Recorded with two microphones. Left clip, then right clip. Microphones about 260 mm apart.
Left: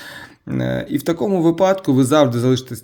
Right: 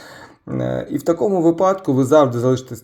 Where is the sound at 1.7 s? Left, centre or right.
Left.